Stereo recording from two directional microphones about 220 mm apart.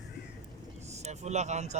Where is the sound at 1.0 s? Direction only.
30° right (ahead or behind).